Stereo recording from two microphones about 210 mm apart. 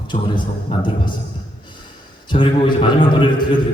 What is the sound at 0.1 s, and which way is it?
A man's voice, 25° left (ahead or behind).